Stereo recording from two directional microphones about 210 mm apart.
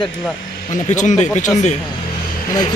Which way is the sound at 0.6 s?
35° left (ahead or behind).